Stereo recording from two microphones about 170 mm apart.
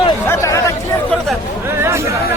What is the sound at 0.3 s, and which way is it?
Chatter, 15° left (ahead or behind).